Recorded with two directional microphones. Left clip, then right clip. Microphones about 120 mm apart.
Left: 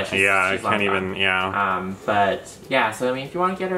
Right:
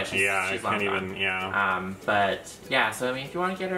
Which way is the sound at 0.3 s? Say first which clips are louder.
Left 7 dB; 40° left (ahead or behind).